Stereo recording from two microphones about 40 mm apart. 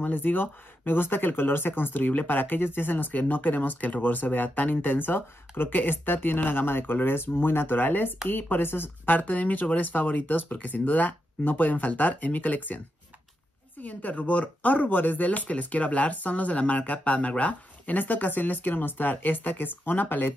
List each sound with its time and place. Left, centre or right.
0.0 s speech: left
9.1 s speech: left
17.9 s speech: left